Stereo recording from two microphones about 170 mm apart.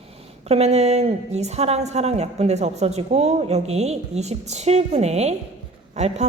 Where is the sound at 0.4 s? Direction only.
40° right (ahead or behind).